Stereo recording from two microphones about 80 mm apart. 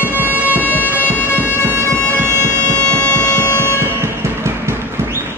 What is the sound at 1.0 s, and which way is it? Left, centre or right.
Bagpipes, left.